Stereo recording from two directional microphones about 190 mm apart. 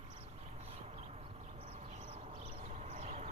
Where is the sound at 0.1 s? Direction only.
30° right (ahead or behind).